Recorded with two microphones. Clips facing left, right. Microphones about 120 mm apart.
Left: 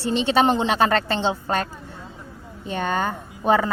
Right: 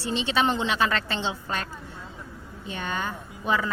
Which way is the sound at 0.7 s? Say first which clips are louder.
Left 6 dB; 40° left (ahead or behind).